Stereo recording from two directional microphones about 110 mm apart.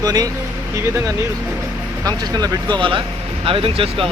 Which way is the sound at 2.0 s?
40° right (ahead or behind).